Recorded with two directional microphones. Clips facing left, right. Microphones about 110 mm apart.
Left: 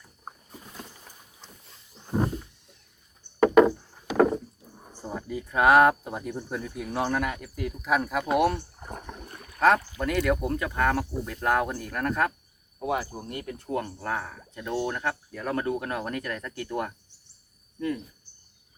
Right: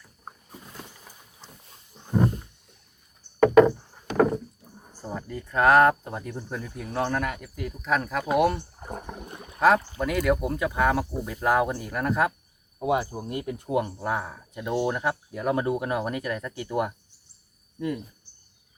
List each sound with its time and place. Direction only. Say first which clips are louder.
3.4 s wood: right 2 dB; 5° left (ahead or behind)
5.0 s speech: left 1 dB; 5° left (ahead or behind)
8.5 s a sound: right 2 dB; 10° right (ahead or behind)
9.6 s speech: right 1 dB; 5° right (ahead or behind)
12.8 s speech: right 4 dB; 20° right (ahead or behind)